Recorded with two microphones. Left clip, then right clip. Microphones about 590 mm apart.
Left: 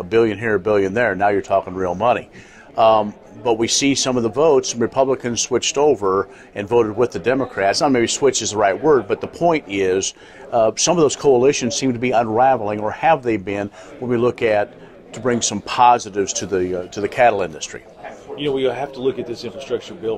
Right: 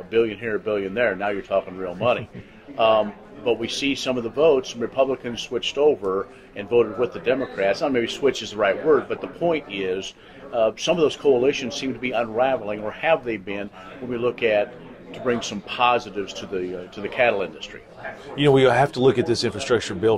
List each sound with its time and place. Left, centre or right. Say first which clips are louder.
0.1 s a man's voice: left 5 dB; left
18.4 s speech: right 4 dB; right